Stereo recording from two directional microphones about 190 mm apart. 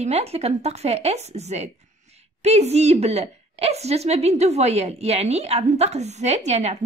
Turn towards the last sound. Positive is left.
turn(degrees=-35)  # may be behind; listen again after turning